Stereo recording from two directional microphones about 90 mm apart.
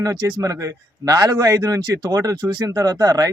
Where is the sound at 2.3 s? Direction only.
55° right (ahead or behind).